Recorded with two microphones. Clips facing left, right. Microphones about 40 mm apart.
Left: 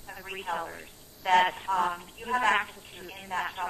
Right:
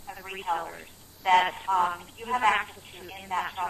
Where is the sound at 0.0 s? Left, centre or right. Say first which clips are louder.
Right 2 dB; centre.